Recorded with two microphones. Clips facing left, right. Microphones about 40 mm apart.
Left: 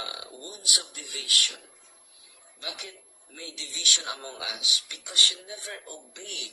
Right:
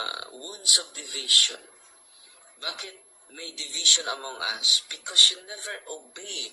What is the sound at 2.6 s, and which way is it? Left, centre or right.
A man's voice, right.